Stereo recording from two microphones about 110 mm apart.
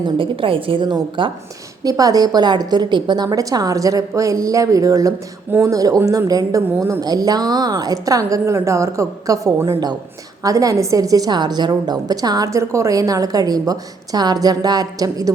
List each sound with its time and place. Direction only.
0.0 s a woman's voice: 55° right (ahead or behind)
1.8 s a woman's voice: 35° right (ahead or behind)
5.5 s speech: 20° right (ahead or behind)
5.7 s a woman's voice: 35° right (ahead or behind)